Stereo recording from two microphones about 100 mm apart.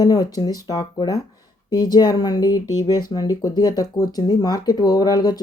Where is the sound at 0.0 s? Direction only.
40° left (ahead or behind).